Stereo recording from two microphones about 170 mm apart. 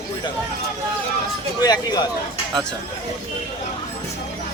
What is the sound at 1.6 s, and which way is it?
Speech, 25° left (ahead or behind).